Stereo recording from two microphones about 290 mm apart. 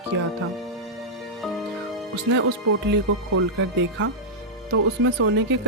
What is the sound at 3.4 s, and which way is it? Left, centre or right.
Speech, right.